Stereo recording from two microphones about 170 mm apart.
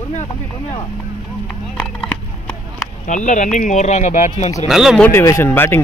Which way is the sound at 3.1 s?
45° left (ahead or behind).